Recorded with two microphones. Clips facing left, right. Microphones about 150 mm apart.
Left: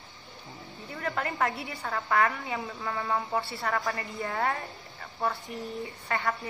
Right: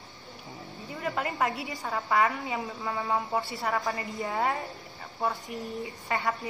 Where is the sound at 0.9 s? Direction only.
15° right (ahead or behind).